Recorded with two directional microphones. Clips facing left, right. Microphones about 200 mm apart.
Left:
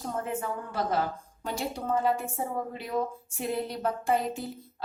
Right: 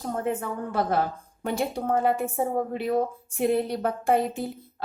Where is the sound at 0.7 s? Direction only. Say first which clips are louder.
Right 4 dB; 60° right (ahead or behind).